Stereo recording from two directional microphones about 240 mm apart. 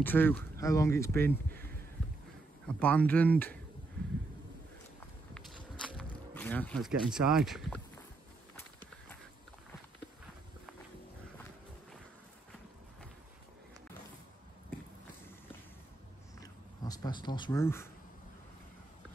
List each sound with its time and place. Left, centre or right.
0.0 s speech: centre
2.8 s speech: centre
5.3 s walk: centre
6.3 s speech: centre
16.3 s a sound: centre